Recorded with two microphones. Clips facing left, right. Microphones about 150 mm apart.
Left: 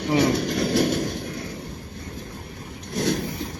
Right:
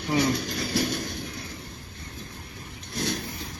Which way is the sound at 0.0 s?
60° left (ahead or behind).